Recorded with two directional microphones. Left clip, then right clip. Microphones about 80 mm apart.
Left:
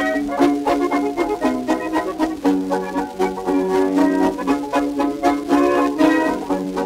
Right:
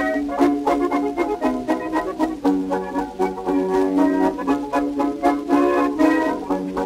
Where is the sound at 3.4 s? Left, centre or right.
Centre.